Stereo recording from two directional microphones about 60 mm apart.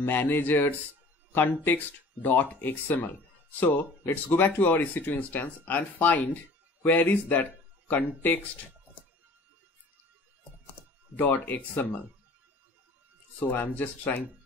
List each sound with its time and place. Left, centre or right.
0.0 s speech: left
11.1 s speech: left
13.4 s speech: left